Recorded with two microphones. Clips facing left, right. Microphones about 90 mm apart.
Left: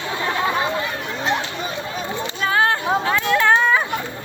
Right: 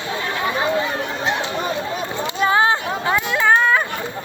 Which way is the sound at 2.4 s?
15° right (ahead or behind).